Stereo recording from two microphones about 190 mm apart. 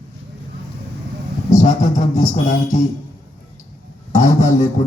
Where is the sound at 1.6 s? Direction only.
40° left (ahead or behind).